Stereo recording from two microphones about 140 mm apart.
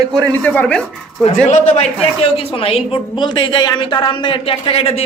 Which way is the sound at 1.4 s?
60° left (ahead or behind).